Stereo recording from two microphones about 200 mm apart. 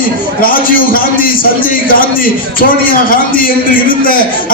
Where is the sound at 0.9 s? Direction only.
45° left (ahead or behind).